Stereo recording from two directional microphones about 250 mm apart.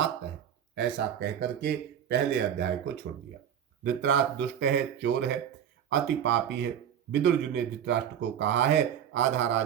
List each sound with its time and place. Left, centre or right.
0.8 s speech: right
3.8 s speech: right